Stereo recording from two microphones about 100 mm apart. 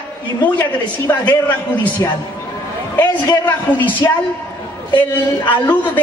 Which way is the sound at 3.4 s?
20° left (ahead or behind).